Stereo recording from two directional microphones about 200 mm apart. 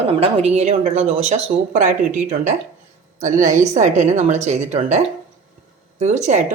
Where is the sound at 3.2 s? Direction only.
40° right (ahead or behind).